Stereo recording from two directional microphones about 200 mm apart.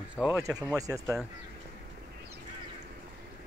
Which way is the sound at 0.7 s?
15° right (ahead or behind).